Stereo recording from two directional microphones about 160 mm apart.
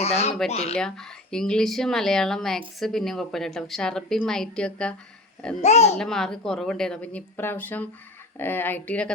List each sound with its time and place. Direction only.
0.0 s speech: 40° left (ahead or behind)
0.8 s speech: 5° left (ahead or behind)
5.6 s a child's voice: 45° left (ahead or behind)
6.0 s speech: 5° left (ahead or behind)